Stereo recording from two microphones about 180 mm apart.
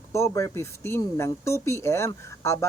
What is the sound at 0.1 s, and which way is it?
Speech, 15° left (ahead or behind).